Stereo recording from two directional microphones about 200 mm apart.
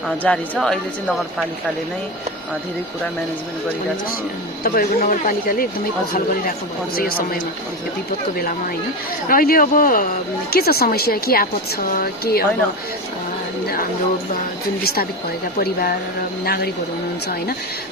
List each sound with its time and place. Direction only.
0.2 s speech: 5° left (ahead or behind)
4.6 s speech: 45° left (ahead or behind)
9.3 s speech: 45° left (ahead or behind)
15.5 s speech: 50° left (ahead or behind)